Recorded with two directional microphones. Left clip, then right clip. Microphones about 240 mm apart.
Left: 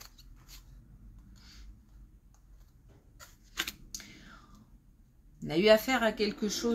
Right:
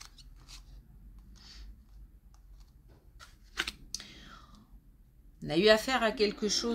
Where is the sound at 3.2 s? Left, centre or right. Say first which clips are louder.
Right 1 dB; centre.